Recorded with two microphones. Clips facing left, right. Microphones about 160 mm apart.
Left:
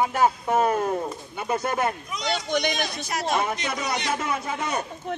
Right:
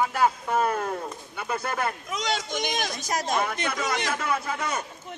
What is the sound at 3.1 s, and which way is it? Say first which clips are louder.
Speech: even; 45° right (ahead or behind).